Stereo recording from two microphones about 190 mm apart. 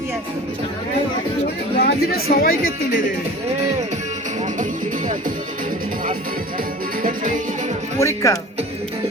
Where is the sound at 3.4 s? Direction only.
35° right (ahead or behind).